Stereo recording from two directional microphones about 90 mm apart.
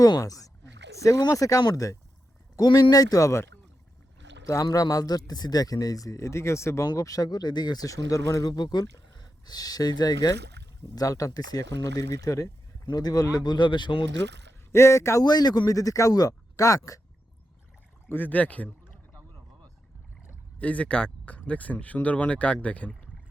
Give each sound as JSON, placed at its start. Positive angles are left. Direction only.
{"t": 0.0, "sound": "speech", "side_deg": 40}
{"t": 4.6, "sound": "speech", "side_deg": 40}
{"t": 14.7, "sound": "speech", "side_deg": 30}
{"t": 15.2, "sound": "speech", "side_deg": 50}
{"t": 18.1, "sound": "a sound", "side_deg": 20}
{"t": 20.6, "sound": "speech", "side_deg": 15}